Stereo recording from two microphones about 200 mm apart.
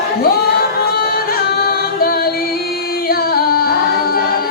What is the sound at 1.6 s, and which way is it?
A capella, 50° left (ahead or behind).